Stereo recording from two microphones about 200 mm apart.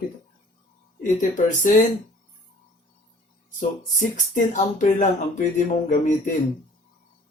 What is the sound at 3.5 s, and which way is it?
Speech, 40° left (ahead or behind).